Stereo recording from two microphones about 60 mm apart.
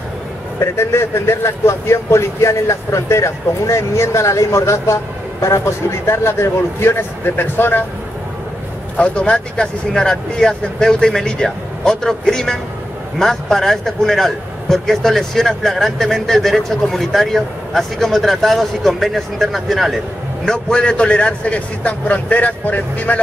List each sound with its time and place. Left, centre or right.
0.6 s speech: left
8.9 s speech: centre
20.4 s a man's voice: centre